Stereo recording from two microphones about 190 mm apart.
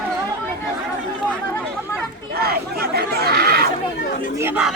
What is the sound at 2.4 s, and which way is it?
Chatter, 55° right (ahead or behind).